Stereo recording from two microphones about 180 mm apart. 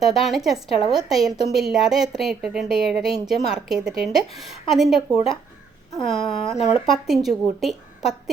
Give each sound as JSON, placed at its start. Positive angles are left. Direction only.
{"t": 0.0, "sound": "speech", "side_deg": 0}
{"t": 6.2, "sound": "speech", "side_deg": 30}
{"t": 6.7, "sound": "a woman's voice", "side_deg": 0}